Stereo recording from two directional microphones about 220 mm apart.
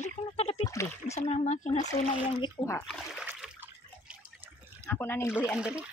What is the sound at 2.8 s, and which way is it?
Trickle, 5° right (ahead or behind).